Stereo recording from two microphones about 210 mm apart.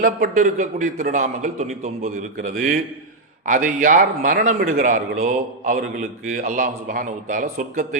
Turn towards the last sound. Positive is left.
turn(degrees=-40)  # may be behind; listen again after turning